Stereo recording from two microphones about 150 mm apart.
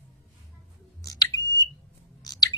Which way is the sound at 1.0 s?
25° left (ahead or behind).